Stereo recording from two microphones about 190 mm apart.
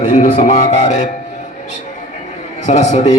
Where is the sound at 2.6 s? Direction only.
35° left (ahead or behind).